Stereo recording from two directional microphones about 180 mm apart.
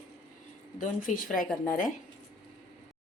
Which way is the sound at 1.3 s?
50° left (ahead or behind).